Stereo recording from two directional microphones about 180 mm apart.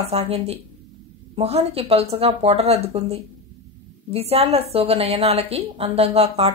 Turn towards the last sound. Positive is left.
turn(degrees=-35)  # may be behind; listen again after turning